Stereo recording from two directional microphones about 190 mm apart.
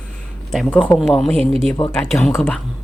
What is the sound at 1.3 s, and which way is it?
Speech, 30° right (ahead or behind).